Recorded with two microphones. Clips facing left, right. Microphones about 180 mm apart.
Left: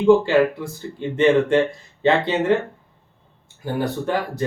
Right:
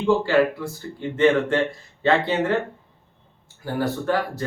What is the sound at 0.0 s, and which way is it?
Speech, 20° left (ahead or behind).